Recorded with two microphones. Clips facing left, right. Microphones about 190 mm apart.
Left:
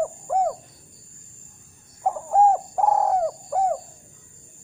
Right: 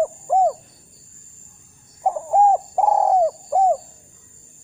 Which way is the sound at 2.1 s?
15° right (ahead or behind).